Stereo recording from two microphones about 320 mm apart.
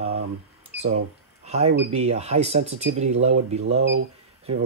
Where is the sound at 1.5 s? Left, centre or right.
Centre.